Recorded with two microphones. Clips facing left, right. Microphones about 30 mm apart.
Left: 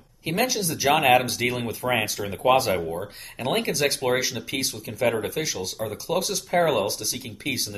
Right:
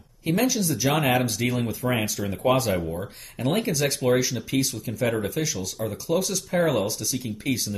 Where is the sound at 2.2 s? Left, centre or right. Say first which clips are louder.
Left 2 dB; left.